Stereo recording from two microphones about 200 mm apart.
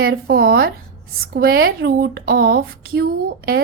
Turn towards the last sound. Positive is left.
turn(degrees=-50)  # may be behind; listen again after turning